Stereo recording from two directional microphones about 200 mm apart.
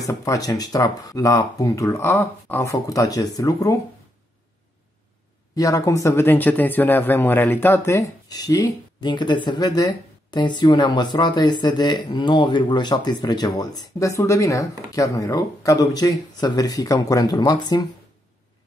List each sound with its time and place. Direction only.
0.0 s speech: 15° left (ahead or behind)
5.6 s speech: 15° left (ahead or behind)